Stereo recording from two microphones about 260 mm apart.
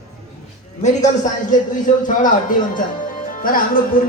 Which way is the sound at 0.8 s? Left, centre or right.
Left.